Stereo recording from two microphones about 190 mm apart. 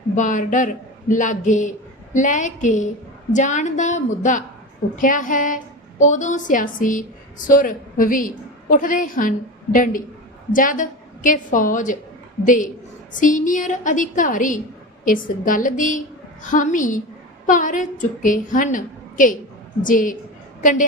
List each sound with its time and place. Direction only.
0.2 s a woman's voice: 40° left (ahead or behind)